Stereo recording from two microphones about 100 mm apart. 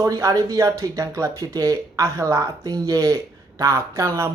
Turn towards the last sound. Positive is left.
turn(degrees=-30)  # may be behind; listen again after turning